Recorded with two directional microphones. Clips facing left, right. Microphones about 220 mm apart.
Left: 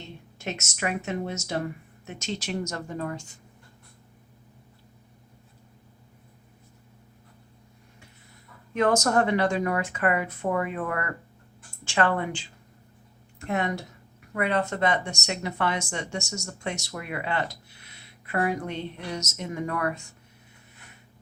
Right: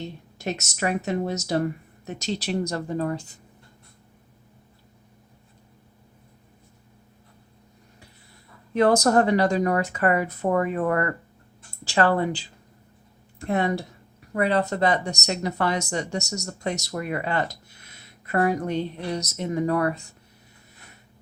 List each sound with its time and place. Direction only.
0.3 s speech: 40° right (ahead or behind)
8.7 s speech: 35° right (ahead or behind)